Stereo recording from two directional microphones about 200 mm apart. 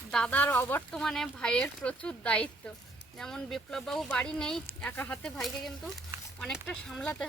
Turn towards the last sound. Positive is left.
turn(degrees=5)  # may be behind; listen again after turning